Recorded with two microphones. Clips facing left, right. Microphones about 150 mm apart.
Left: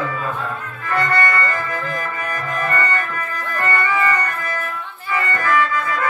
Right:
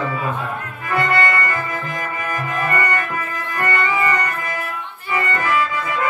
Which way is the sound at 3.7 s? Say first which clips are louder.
Even; 15° right (ahead or behind).